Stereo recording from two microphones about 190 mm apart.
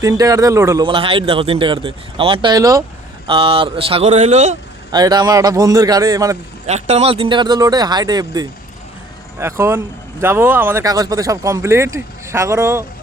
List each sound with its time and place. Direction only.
0.0 s speech: 20° right (ahead or behind)
3.2 s speech: 30° right (ahead or behind)
4.9 s speech: 20° right (ahead or behind)
6.7 s speech: 35° right (ahead or behind); by 12.8 s 15° right (ahead or behind)